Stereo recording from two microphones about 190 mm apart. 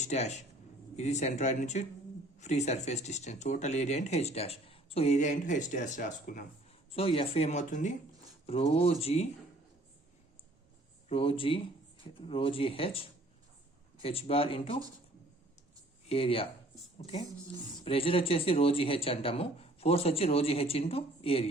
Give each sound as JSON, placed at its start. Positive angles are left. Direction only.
{"t": 0.0, "sound": "speech", "side_deg": 35}
{"t": 6.9, "sound": "speech", "side_deg": 30}
{"t": 11.1, "sound": "speech", "side_deg": 30}
{"t": 16.0, "sound": "speech", "side_deg": 30}
{"t": 17.8, "sound": "speech", "side_deg": 30}